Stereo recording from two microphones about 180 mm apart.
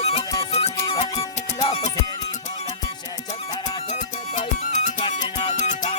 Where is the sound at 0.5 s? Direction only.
35° left (ahead or behind).